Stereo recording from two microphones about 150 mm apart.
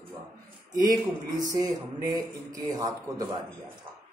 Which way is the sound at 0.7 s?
25° right (ahead or behind).